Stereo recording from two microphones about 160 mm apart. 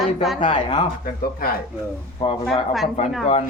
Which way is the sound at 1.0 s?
65° left (ahead or behind).